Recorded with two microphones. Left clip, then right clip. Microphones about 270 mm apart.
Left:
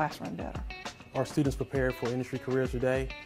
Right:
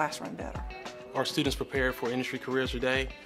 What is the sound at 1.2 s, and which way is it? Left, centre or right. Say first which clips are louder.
Speech: right 1 dB; left.